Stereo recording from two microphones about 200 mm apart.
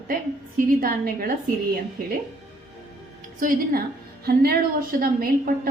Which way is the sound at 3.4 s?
50° right (ahead or behind).